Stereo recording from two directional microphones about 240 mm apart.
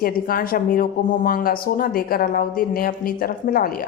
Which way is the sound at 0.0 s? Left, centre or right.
Left.